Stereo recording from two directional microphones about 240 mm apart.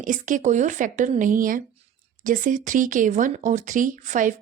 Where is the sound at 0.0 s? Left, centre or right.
Right.